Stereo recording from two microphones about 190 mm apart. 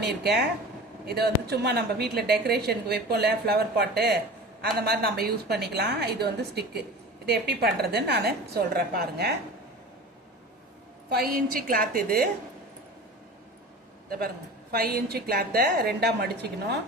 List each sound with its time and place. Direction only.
0.0 s a woman's voice: 60° right (ahead or behind)
11.1 s a woman's voice: 50° right (ahead or behind)
14.7 s a woman's voice: 55° right (ahead or behind)